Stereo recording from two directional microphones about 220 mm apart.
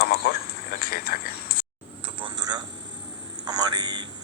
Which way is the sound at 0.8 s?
40° left (ahead or behind).